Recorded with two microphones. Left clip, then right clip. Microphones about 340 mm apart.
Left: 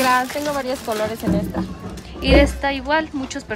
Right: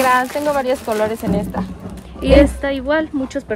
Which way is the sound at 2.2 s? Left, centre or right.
Centre.